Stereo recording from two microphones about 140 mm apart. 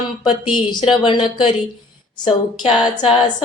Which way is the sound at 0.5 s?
35° left (ahead or behind).